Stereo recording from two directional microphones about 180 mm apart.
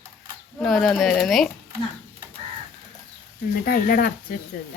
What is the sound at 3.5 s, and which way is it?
Speech, 55° left (ahead or behind).